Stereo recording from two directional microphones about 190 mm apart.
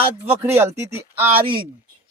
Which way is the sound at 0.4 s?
15° right (ahead or behind).